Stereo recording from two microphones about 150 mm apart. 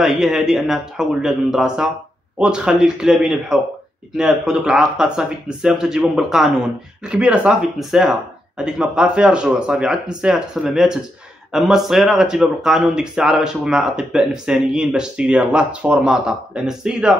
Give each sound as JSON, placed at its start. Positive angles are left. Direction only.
{"t": 0.0, "sound": "speech", "side_deg": -5}